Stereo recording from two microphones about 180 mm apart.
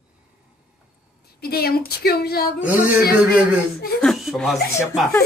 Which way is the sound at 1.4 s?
60° left (ahead or behind).